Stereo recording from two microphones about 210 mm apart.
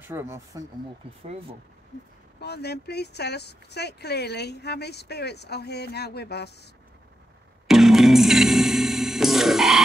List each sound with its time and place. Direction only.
0.0 s speech: 10° right (ahead or behind)
1.2 s speech: 30° right (ahead or behind)
2.4 s speech: 50° left (ahead or behind)
7.6 s music: centre (ahead or behind)